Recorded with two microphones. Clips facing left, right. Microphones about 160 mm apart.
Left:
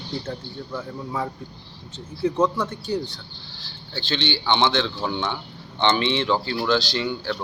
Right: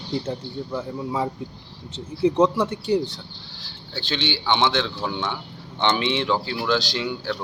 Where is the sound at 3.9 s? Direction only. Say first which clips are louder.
Left 1 dB; 5° right (ahead or behind).